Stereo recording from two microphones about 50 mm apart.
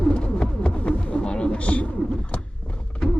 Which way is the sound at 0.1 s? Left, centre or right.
Left.